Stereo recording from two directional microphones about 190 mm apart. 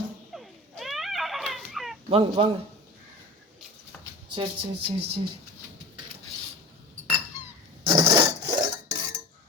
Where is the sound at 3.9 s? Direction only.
10° left (ahead or behind).